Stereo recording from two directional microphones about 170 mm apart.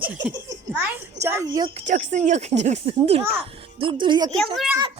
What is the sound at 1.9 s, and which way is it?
A woman's voice, 45° right (ahead or behind).